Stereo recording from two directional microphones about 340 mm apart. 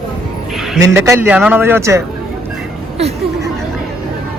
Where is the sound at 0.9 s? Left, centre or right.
Centre.